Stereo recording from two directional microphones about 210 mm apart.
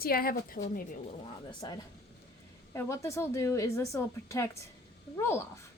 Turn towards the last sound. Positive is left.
turn(degrees=10)  # may be behind; listen again after turning